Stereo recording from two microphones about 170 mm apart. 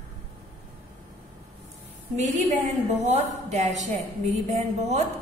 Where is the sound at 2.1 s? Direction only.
45° right (ahead or behind).